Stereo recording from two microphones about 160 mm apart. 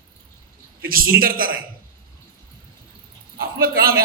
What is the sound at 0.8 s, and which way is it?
Speech, 65° right (ahead or behind).